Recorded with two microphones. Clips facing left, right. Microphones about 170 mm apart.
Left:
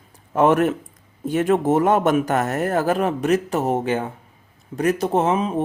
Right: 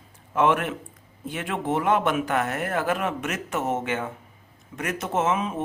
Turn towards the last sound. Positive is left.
turn(degrees=35)  # may be behind; listen again after turning